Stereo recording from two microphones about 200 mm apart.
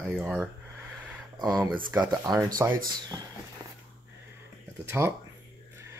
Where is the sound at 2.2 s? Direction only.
20° right (ahead or behind).